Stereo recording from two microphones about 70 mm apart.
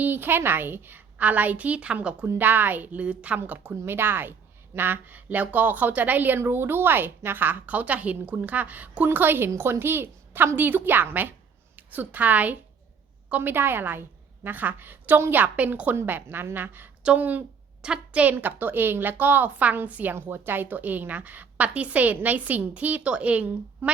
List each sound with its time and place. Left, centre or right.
0.0 s a woman's voice: right
2.2 s a woman's voice: right